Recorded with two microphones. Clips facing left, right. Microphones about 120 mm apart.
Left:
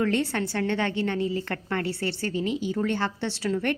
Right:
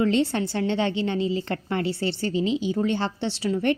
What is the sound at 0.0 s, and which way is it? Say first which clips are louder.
A woman's voice: right 3 dB; 20° right (ahead or behind).